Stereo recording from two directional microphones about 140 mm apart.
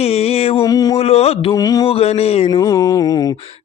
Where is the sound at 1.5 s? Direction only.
25° left (ahead or behind).